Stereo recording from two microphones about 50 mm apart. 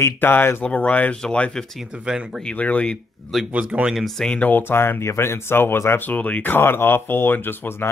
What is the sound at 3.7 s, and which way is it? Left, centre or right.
Speech, right.